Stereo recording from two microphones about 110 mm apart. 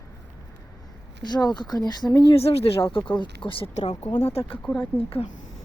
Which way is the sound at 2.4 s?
65° left (ahead or behind).